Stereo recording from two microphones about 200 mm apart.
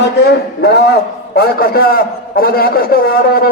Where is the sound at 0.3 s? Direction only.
55° left (ahead or behind).